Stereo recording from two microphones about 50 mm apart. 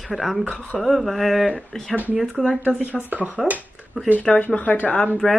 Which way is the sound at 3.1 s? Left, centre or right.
Right.